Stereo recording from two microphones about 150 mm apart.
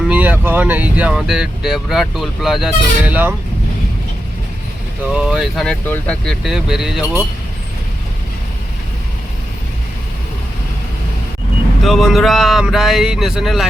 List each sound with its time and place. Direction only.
0.1 s speech: 10° right (ahead or behind)
5.1 s speech: 5° right (ahead or behind)
5.8 s speech: 15° left (ahead or behind)
6.2 s speech: 5° right (ahead or behind)
11.8 s speech: centre (ahead or behind)